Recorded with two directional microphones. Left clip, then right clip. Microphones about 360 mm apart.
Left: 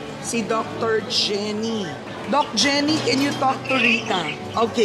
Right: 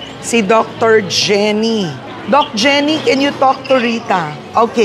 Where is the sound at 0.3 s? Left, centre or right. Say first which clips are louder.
Right 12 dB; right.